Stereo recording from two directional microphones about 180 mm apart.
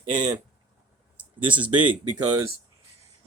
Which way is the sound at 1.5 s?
10° right (ahead or behind).